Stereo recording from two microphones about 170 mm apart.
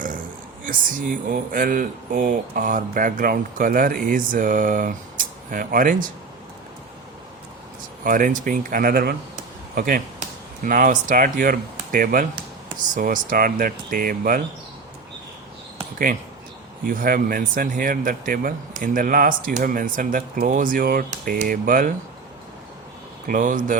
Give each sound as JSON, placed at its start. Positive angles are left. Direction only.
{"t": 0.6, "sound": "speech", "side_deg": -50}
{"t": 8.0, "sound": "speech", "side_deg": -55}
{"t": 16.8, "sound": "speech", "side_deg": -55}
{"t": 23.2, "sound": "speech", "side_deg": -50}